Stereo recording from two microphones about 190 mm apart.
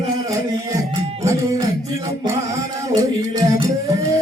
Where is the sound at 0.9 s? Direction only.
20° right (ahead or behind).